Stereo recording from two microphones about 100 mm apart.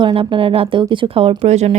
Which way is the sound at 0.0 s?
60° right (ahead or behind).